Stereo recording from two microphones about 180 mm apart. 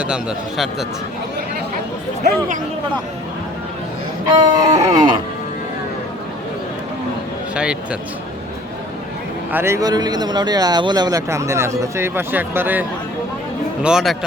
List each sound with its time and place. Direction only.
0.0 s speech: 5° right (ahead or behind)
4.4 s chicken: 25° right (ahead or behind)
7.5 s speech: 5° right (ahead or behind)
9.5 s speech: 10° right (ahead or behind)
13.8 s speech: centre (ahead or behind)